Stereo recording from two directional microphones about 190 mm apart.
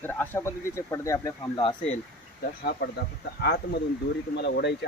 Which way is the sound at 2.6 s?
55° left (ahead or behind).